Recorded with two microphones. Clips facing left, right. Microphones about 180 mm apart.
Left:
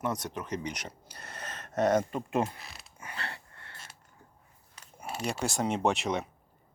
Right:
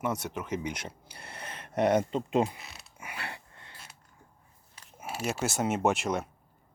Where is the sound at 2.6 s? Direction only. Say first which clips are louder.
Right 1 dB; centre (ahead or behind).